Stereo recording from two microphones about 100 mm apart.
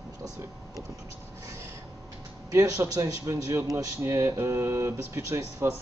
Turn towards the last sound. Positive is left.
turn(degrees=-30)  # may be behind; listen again after turning